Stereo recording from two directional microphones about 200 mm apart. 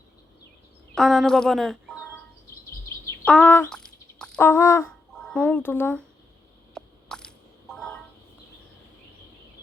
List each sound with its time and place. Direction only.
0.9 s speech: centre (ahead or behind)
3.2 s a sound: 5° left (ahead or behind)
6.7 s crushing: 5° left (ahead or behind)
7.7 s telephone: 5° left (ahead or behind)